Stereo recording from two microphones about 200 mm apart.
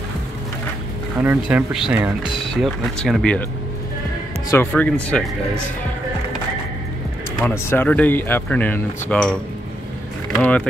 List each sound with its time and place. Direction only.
1.1 s speech: 10° right (ahead or behind)
2.2 s speech: 25° left (ahead or behind)
2.5 s speech: centre (ahead or behind)
4.5 s speech: 10° left (ahead or behind)
7.3 s speech: 10° left (ahead or behind)
10.4 s speech: 5° left (ahead or behind)